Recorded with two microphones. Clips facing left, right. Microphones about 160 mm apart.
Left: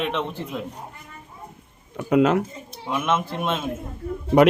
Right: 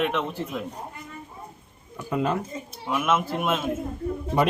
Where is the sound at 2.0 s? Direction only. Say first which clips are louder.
Left 8 dB; 75° left (ahead or behind).